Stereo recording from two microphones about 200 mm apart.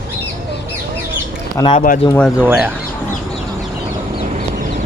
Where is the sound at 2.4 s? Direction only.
5° right (ahead or behind).